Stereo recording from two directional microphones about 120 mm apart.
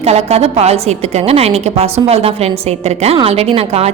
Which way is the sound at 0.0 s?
60° right (ahead or behind).